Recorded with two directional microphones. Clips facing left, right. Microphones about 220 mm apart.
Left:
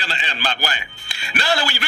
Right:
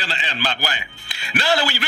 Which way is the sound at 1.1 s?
45° left (ahead or behind).